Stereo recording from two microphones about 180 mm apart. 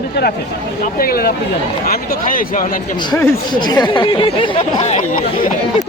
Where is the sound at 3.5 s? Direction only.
25° left (ahead or behind).